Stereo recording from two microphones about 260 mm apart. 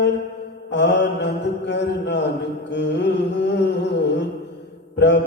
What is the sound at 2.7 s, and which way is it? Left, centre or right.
Carnatic music, left.